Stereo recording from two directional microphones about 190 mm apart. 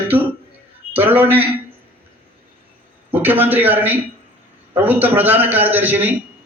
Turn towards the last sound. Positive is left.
turn(degrees=-10)  # may be behind; listen again after turning